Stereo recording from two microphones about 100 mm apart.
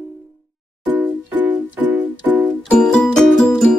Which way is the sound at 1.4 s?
20° right (ahead or behind).